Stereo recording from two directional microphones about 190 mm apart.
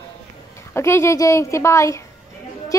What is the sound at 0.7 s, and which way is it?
A woman's voice, 15° left (ahead or behind).